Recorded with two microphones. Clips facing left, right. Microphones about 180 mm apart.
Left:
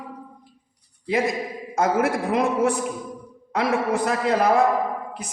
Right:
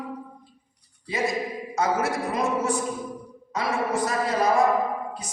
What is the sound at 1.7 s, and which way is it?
A man's voice, 55° left (ahead or behind).